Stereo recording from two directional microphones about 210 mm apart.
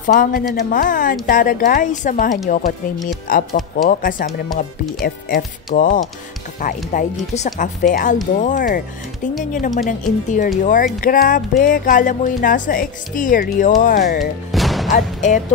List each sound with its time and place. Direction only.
0.0 s speech: 40° left (ahead or behind)
14.5 s music: centre (ahead or behind)
14.9 s speech: 35° left (ahead or behind)